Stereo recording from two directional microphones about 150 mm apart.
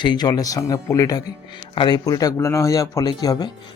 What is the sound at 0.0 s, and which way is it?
Speech, 30° left (ahead or behind).